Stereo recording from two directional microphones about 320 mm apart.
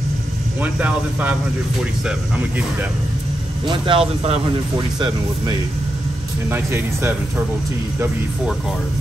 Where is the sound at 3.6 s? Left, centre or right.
Centre.